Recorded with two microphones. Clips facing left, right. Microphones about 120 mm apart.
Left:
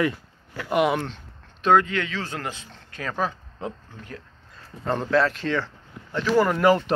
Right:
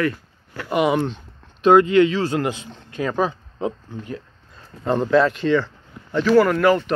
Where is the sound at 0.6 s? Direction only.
Centre (ahead or behind).